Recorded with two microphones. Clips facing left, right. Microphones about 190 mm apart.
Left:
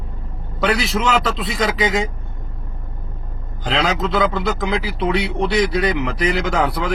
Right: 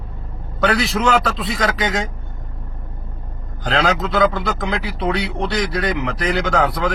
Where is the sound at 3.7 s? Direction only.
Centre (ahead or behind).